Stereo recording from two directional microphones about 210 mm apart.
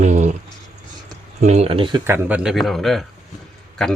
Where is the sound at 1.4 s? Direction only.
30° right (ahead or behind).